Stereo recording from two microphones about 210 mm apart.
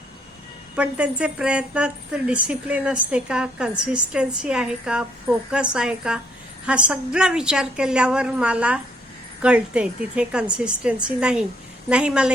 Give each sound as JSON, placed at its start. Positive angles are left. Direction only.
{"t": 0.8, "sound": "a woman's voice", "side_deg": -5}